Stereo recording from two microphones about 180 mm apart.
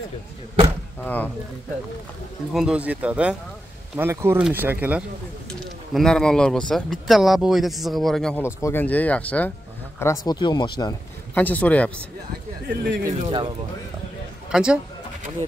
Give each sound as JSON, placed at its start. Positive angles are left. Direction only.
{"t": 1.0, "sound": "speech", "side_deg": 10}
{"t": 2.5, "sound": "speech", "side_deg": -5}
{"t": 5.9, "sound": "speech", "side_deg": 5}
{"t": 8.5, "sound": "speech", "side_deg": 15}
{"t": 11.3, "sound": "speech", "side_deg": 10}
{"t": 12.6, "sound": "speech", "side_deg": -60}
{"t": 13.3, "sound": "speech", "side_deg": -25}
{"t": 14.5, "sound": "speech", "side_deg": -5}